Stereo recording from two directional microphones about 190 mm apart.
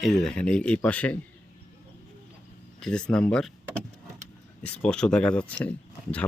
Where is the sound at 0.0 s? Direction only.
Centre (ahead or behind).